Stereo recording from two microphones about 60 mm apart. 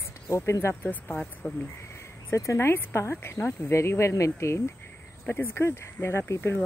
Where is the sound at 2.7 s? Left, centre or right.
Left.